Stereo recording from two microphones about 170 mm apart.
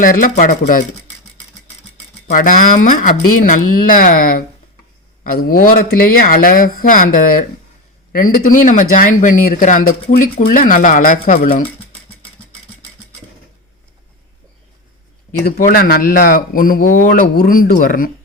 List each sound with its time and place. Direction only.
0.0 s speech: 55° left (ahead or behind)
2.3 s speech: 55° left (ahead or behind)
15.4 s speech: 60° left (ahead or behind)